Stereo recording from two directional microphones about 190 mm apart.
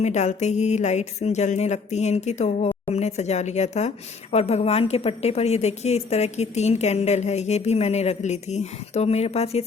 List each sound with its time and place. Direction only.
0.0 s a woman's voice: 35° left (ahead or behind)